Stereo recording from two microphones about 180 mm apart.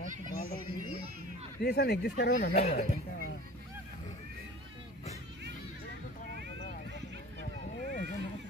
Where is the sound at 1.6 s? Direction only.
65° left (ahead or behind).